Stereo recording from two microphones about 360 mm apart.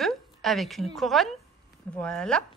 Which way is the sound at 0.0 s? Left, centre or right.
Centre.